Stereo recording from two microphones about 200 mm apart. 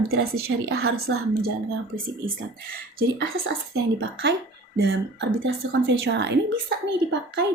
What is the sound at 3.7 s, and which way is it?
A woman's voice, 60° right (ahead or behind).